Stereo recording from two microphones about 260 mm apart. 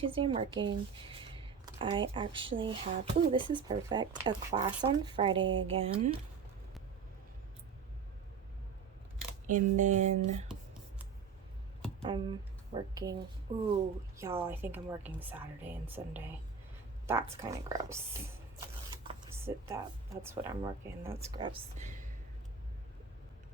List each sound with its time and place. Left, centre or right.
0.0 s speech: right
9.5 s speech: right
12.0 s a woman's voice: centre
19.4 s a woman's voice: centre; by 22.1 s right